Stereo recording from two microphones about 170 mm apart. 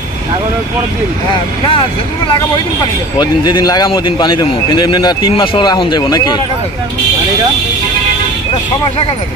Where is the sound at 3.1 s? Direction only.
25° left (ahead or behind).